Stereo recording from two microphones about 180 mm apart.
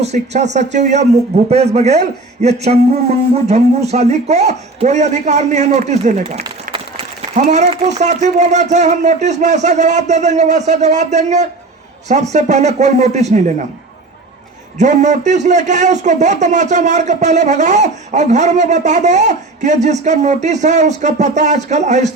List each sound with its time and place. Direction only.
0.0 s a man's voice: 40° right (ahead or behind)
6.4 s a man's voice: 30° right (ahead or behind)
14.8 s a man's voice: 40° right (ahead or behind)